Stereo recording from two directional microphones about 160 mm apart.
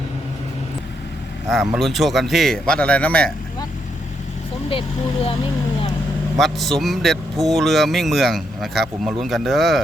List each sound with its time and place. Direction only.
1.5 s speech: centre (ahead or behind)
4.7 s speech: 35° left (ahead or behind)
6.3 s speech: centre (ahead or behind)